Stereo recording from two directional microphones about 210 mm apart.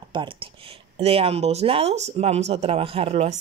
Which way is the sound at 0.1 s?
25° right (ahead or behind).